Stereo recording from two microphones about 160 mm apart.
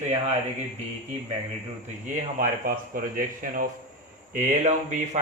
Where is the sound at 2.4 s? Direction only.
60° right (ahead or behind).